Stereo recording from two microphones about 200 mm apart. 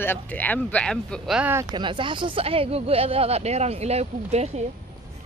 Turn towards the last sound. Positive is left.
turn(degrees=-30)  # may be behind; listen again after turning